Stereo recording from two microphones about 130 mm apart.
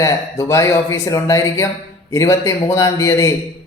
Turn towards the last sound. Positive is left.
turn(degrees=25)  # may be behind; listen again after turning